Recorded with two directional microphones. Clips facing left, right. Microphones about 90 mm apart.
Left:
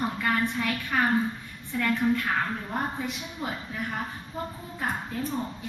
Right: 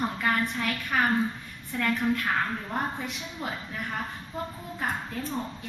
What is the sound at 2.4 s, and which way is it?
A woman's voice, 10° left (ahead or behind).